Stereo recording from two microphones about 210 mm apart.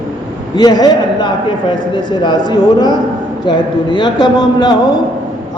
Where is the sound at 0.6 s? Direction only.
20° left (ahead or behind).